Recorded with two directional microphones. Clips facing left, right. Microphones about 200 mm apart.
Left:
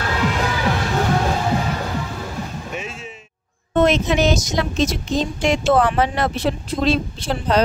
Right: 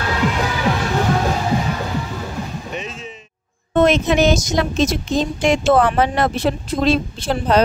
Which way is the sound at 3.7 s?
55° right (ahead or behind).